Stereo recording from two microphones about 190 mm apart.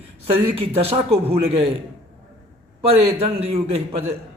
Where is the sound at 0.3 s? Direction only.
30° right (ahead or behind).